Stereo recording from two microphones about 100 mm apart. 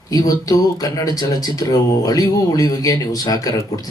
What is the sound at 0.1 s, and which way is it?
Speech, 40° left (ahead or behind).